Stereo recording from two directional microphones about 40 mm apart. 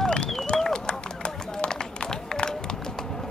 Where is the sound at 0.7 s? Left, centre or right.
Left.